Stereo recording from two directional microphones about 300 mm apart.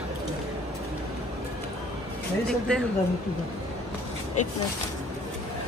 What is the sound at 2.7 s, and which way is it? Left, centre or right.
Speech, centre.